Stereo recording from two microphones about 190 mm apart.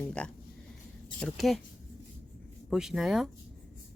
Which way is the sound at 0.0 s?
5° left (ahead or behind).